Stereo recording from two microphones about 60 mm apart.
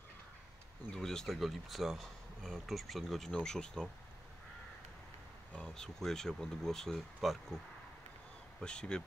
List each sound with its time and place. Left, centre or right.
0.9 s speech: centre
5.8 s speech: centre
8.5 s speech: centre